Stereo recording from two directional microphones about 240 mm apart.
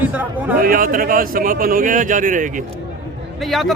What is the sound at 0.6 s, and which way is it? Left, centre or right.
A man's voice, right.